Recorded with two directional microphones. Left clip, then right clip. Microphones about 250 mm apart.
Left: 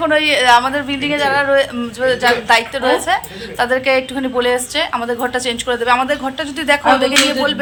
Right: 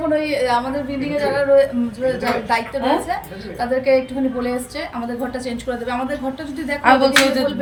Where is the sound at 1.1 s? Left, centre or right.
Centre.